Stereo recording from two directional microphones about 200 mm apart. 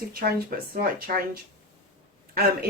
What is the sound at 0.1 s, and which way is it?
A woman's voice, 50° right (ahead or behind).